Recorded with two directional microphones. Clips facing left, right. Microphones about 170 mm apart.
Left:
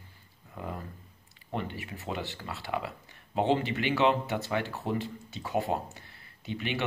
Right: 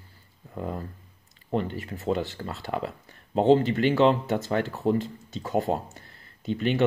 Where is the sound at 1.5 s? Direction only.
40° right (ahead or behind).